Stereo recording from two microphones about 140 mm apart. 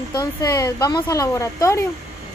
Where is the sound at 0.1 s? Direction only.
25° left (ahead or behind).